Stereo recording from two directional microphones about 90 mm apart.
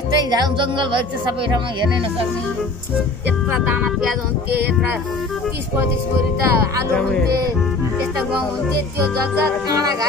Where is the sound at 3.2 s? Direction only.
20° right (ahead or behind).